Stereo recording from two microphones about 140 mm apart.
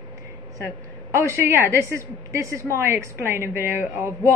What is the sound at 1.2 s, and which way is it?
A woman's voice, 15° right (ahead or behind).